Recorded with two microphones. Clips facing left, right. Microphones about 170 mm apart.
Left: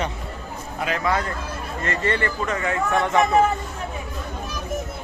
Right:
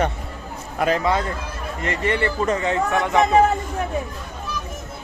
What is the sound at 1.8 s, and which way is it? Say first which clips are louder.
A man's voice: right 2 dB; 15° right (ahead or behind).